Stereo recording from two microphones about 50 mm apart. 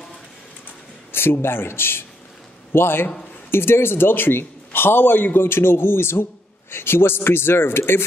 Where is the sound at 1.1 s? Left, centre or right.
Left.